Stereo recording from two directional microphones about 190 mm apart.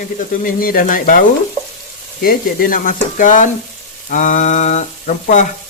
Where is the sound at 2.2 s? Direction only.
50° left (ahead or behind).